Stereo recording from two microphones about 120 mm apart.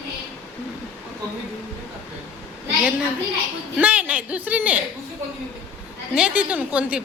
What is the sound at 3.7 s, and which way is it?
A woman's voice, 15° right (ahead or behind).